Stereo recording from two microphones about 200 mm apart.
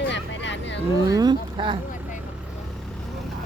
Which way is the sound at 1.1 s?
20° right (ahead or behind).